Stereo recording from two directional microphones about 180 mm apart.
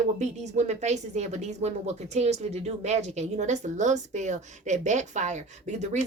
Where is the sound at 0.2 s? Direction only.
40° right (ahead or behind).